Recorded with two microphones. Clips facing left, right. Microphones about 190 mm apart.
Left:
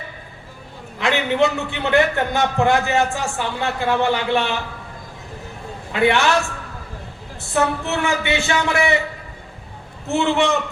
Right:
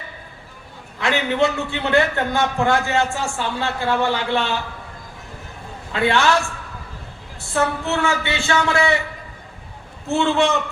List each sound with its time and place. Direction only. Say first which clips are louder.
0.9 s a man's voice: left 1 dB; 20° left (ahead or behind)
5.9 s a man's voice: left 1 dB; 20° left (ahead or behind)
7.5 s a man's voice: left 1 dB; 20° left (ahead or behind)
10.1 s a man's voice: even; 20° left (ahead or behind)